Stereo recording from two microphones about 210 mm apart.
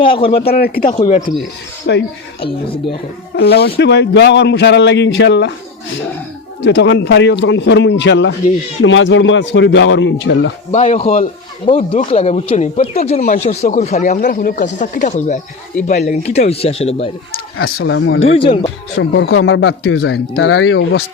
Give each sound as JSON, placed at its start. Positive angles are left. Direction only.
{"t": 0.0, "sound": "speech", "side_deg": 25}
{"t": 0.4, "sound": "speech", "side_deg": 45}
{"t": 1.9, "sound": "a man's voice", "side_deg": 55}
{"t": 2.4, "sound": "speech", "side_deg": 25}
{"t": 3.3, "sound": "a man's voice", "side_deg": 50}
{"t": 6.6, "sound": "a man's voice", "side_deg": 60}
{"t": 10.7, "sound": "speech", "side_deg": 35}
{"t": 11.6, "sound": "speech", "side_deg": 25}
{"t": 17.6, "sound": "speech", "side_deg": 75}
{"t": 18.3, "sound": "speech", "side_deg": 25}
{"t": 18.9, "sound": "a man's voice", "side_deg": 65}